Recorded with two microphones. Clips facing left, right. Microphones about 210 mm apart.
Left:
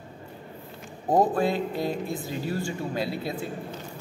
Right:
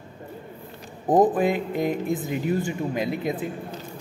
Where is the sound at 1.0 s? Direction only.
20° right (ahead or behind).